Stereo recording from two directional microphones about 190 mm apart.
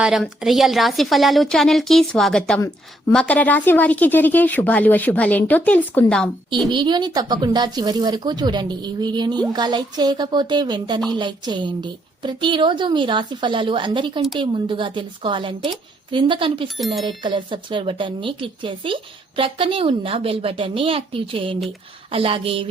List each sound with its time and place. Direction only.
0.0 s a woman's voice: centre (ahead or behind)
6.7 s a woman's voice: 25° right (ahead or behind)
16.8 s a woman's voice: centre (ahead or behind)
17.1 s a woman's voice: 25° right (ahead or behind)